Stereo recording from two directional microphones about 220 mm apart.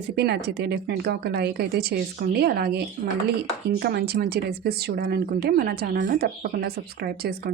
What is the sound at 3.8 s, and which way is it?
Speech, 45° right (ahead or behind).